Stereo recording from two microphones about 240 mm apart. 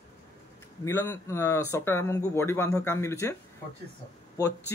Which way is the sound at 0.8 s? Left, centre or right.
Centre.